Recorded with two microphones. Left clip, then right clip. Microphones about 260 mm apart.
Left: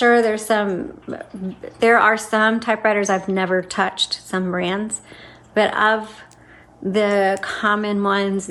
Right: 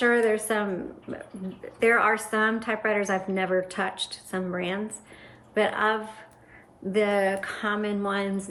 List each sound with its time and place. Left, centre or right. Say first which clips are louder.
0.0 s a woman's voice: left 7 dB; left